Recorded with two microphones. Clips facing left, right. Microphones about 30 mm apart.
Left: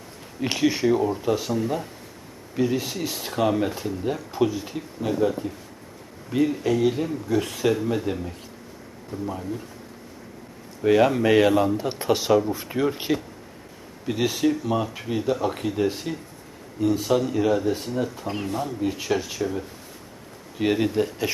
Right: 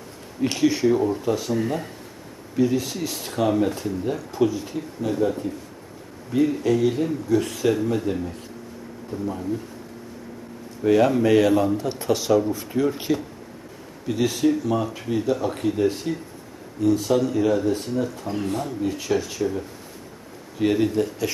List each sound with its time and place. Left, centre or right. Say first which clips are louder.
0.4 s speech: right 2 dB; centre
2.6 s speech: right 2 dB; centre
6.3 s speech: right 2 dB; centre
10.8 s speech: right 1 dB; centre